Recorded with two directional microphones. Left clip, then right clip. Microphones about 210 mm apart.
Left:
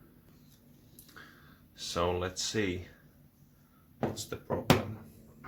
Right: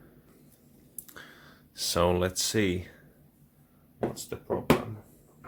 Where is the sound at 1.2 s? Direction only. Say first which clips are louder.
Right 4 dB; 40° right (ahead or behind).